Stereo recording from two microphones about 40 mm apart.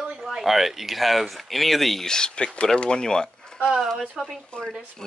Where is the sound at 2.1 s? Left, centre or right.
Centre.